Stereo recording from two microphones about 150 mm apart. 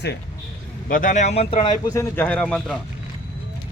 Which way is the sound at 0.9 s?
60° left (ahead or behind).